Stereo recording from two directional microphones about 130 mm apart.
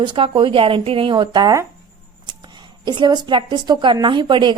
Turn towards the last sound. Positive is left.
turn(degrees=-35)  # may be behind; listen again after turning